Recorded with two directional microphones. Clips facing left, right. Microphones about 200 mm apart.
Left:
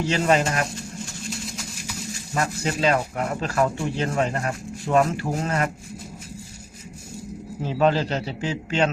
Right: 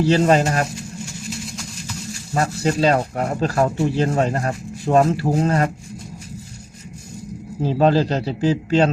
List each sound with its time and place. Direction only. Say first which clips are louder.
0.0 s speech: right 5 dB; 35° right (ahead or behind)
2.3 s speech: right 5 dB; 35° right (ahead or behind)
7.6 s speech: right 4 dB; 35° right (ahead or behind)